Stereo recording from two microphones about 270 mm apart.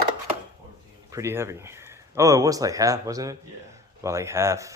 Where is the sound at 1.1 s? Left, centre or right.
Centre.